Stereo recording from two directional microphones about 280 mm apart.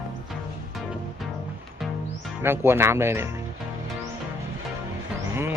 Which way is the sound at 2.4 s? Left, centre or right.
Centre.